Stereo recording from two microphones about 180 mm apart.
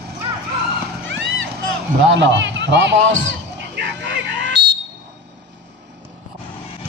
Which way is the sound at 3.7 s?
80° right.